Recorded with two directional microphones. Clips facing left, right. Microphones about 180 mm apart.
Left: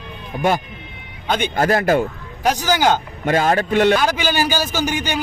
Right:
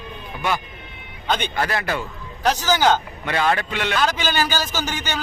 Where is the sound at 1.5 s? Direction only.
45° left (ahead or behind).